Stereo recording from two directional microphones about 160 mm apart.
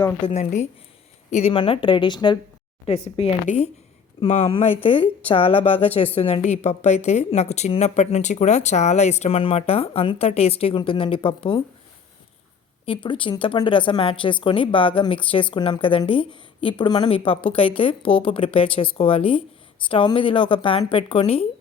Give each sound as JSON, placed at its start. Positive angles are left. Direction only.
{"t": 0.3, "sound": "speech", "side_deg": 45}
{"t": 2.8, "sound": "speech", "side_deg": 40}
{"t": 12.8, "sound": "speech", "side_deg": 30}